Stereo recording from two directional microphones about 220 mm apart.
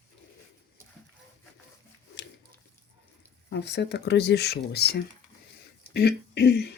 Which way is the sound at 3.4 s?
50° left (ahead or behind).